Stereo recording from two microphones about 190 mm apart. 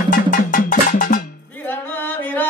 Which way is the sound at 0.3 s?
45° left (ahead or behind).